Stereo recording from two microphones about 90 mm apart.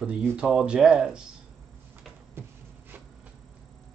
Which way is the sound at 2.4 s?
25° right (ahead or behind).